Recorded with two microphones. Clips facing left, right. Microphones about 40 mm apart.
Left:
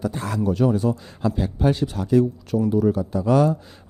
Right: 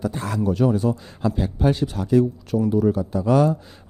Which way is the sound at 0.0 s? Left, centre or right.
Right.